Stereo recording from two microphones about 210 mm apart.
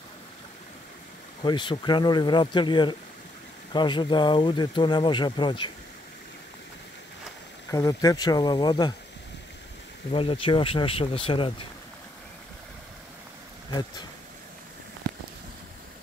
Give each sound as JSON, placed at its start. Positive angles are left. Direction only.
{"t": 1.4, "sound": "speech", "side_deg": 20}
{"t": 7.7, "sound": "speech", "side_deg": 15}
{"t": 10.1, "sound": "speech", "side_deg": 25}
{"t": 13.7, "sound": "speech", "side_deg": 20}